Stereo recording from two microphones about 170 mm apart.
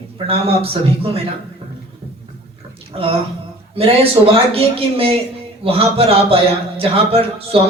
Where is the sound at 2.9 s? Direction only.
35° right (ahead or behind).